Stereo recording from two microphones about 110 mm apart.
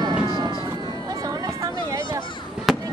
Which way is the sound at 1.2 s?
30° right (ahead or behind).